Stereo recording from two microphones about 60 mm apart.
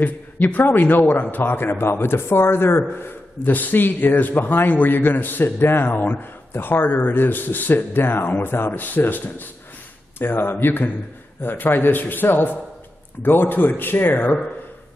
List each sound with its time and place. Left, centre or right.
0.0 s speech: left